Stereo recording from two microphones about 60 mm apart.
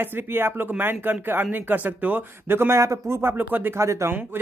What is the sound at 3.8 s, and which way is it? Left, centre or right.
Speech, right.